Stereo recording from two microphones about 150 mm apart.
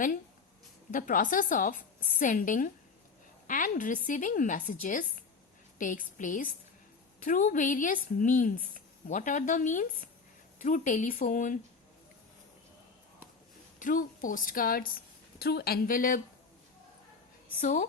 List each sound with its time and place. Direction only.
0.9 s speech: 65° left (ahead or behind)
13.7 s speech: 65° left (ahead or behind)
15.4 s speech: 90° left; by 16.2 s 65° left (ahead or behind)
17.6 s speech: 60° left (ahead or behind)